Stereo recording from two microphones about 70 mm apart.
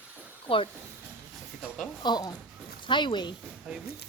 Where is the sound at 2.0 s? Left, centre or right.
Left.